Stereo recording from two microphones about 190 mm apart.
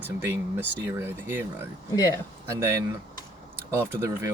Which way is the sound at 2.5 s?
15° right (ahead or behind).